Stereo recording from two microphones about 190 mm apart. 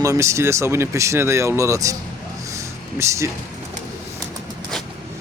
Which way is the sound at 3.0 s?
15° right (ahead or behind).